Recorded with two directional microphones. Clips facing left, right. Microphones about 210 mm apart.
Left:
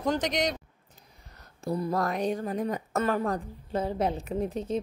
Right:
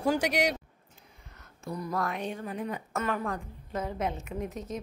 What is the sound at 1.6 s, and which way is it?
A woman's voice, 30° left (ahead or behind).